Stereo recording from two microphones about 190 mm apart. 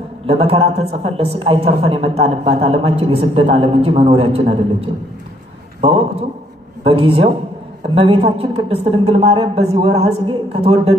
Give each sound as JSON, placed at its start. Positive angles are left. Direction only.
{"t": 0.3, "sound": "a woman's voice", "side_deg": -30}